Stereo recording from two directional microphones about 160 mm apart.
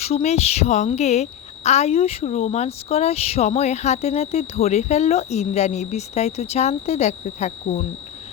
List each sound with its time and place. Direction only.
0.0 s a woman's voice: 40° left (ahead or behind)